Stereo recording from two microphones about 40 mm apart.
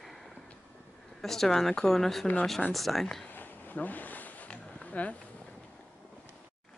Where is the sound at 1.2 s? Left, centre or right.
Centre.